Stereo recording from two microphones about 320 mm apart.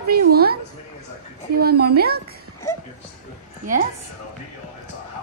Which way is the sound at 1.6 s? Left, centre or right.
Right.